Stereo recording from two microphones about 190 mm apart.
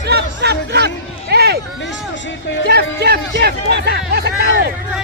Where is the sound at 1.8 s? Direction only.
75° left (ahead or behind).